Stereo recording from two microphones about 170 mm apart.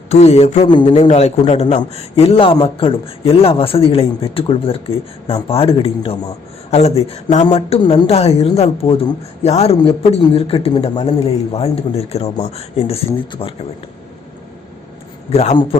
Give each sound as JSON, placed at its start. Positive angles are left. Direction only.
{"t": 0.1, "sound": "a woman's voice", "side_deg": 40}
{"t": 0.7, "sound": "a woman's voice", "side_deg": 25}
{"t": 15.3, "sound": "a woman's voice", "side_deg": 40}